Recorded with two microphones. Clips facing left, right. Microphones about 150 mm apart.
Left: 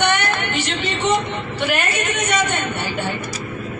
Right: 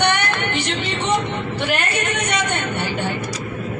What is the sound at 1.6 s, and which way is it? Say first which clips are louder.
Speech: left 2 dB; 10° left (ahead or behind).